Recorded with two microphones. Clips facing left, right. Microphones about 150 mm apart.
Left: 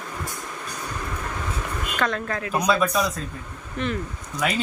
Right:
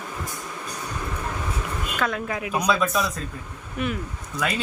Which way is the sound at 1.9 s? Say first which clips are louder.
Left 1 dB; 5° right (ahead or behind).